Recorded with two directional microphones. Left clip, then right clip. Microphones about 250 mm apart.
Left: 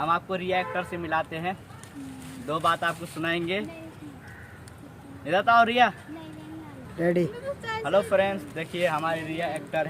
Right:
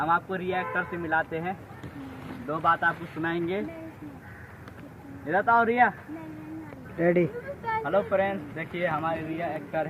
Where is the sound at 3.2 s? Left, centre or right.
Left.